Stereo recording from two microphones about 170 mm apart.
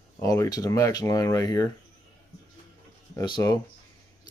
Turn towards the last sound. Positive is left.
turn(degrees=25)  # may be behind; listen again after turning